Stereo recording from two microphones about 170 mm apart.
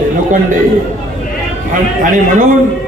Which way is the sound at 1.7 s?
55° right (ahead or behind).